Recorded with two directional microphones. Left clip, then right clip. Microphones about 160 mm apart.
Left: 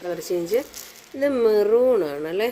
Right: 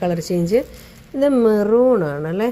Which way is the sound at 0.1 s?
35° right (ahead or behind).